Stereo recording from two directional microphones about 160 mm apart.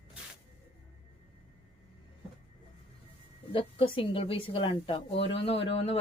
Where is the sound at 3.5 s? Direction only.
35° left (ahead or behind).